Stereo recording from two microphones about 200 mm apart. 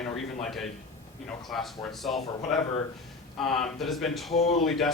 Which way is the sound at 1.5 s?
Centre (ahead or behind).